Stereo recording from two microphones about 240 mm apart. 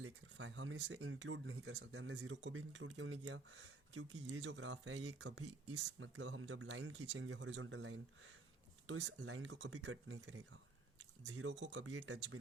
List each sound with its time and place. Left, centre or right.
0.0 s speech: right